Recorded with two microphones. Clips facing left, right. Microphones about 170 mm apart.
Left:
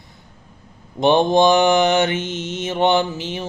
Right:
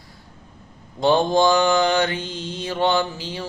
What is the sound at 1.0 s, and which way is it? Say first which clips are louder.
Speech: left 3 dB; 20° left (ahead or behind).